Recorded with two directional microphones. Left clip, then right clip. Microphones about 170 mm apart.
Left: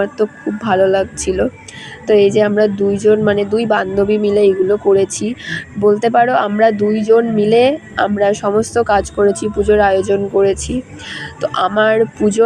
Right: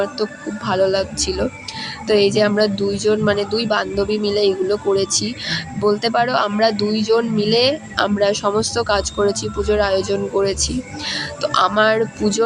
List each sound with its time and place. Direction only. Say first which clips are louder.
0.0 s a woman's voice: left 5 dB; 15° left (ahead or behind)